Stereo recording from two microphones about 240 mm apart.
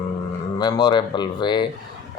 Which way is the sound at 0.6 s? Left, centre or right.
Centre.